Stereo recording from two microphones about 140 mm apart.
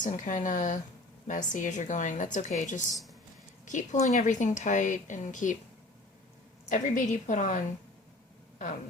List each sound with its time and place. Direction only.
0.0 s a woman's voice: 65° left (ahead or behind)
6.7 s a woman's voice: 65° left (ahead or behind)